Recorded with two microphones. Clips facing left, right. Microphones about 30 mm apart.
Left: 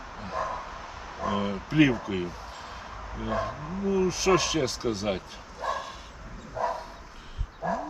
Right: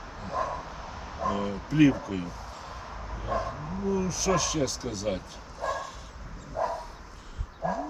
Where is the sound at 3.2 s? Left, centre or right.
Left.